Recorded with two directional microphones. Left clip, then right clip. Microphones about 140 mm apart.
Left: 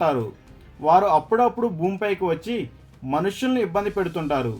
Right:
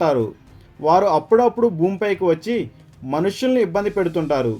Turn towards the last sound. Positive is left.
turn(degrees=-25)  # may be behind; listen again after turning